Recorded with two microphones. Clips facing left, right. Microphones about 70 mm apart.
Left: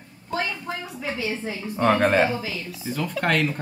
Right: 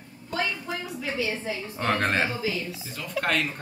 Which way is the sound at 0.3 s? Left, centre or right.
Left.